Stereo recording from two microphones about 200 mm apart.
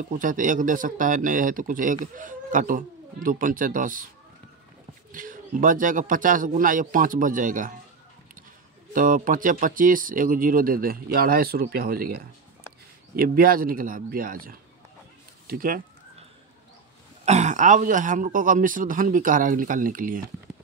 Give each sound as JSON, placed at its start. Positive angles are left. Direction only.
{"t": 0.1, "sound": "a man's voice", "side_deg": -40}
{"t": 5.1, "sound": "a man's voice", "side_deg": -40}
{"t": 8.9, "sound": "speech", "side_deg": -45}
{"t": 13.1, "sound": "speech", "side_deg": -50}
{"t": 17.2, "sound": "a man's voice", "side_deg": -35}